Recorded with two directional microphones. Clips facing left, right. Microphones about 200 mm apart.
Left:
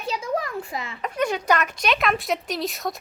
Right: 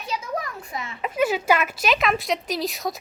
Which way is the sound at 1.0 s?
5° right (ahead or behind).